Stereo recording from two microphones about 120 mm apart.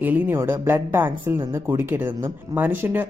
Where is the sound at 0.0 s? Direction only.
20° right (ahead or behind).